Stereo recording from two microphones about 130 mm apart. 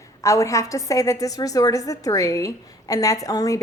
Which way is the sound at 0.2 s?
25° left (ahead or behind).